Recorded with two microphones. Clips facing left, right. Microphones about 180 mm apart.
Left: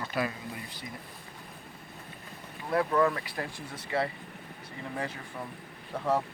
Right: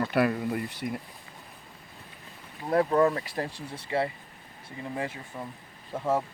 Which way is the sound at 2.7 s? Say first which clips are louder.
Right 3 dB; 35° right (ahead or behind).